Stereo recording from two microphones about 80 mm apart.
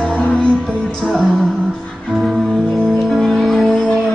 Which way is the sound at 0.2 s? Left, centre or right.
Centre.